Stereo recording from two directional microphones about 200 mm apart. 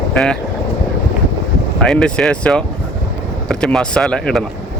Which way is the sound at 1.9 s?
5° left (ahead or behind).